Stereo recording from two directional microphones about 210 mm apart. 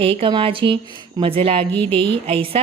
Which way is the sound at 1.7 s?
10° left (ahead or behind).